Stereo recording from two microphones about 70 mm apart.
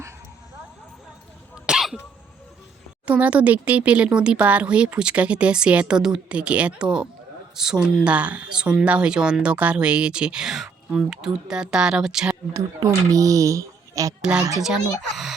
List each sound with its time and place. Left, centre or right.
1.6 s cough: centre
3.1 s speech: centre
13.1 s a sound: right
14.2 s speech: centre